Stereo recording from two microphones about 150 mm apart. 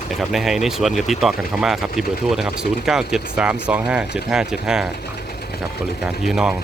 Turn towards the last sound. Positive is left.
turn(degrees=-5)  # may be behind; listen again after turning